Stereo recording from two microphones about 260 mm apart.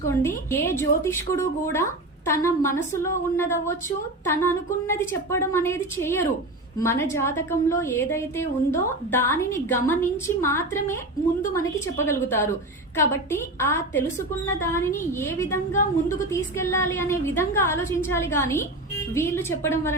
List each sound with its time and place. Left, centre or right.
0.1 s a woman's voice: centre
13.6 s a woman's voice: centre